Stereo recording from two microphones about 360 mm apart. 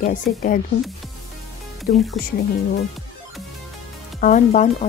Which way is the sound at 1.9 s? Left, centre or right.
Left.